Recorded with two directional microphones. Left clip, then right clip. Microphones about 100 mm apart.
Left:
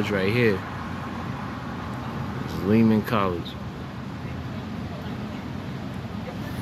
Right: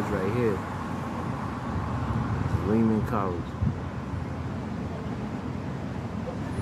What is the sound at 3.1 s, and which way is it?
Speech, 25° left (ahead or behind).